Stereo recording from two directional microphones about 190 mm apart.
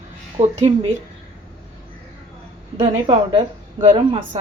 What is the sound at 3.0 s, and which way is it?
A woman's voice, 30° right (ahead or behind).